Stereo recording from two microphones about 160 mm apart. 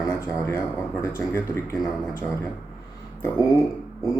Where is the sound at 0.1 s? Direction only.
15° left (ahead or behind).